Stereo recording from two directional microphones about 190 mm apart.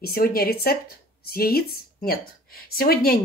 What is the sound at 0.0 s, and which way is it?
Speech, 50° left (ahead or behind).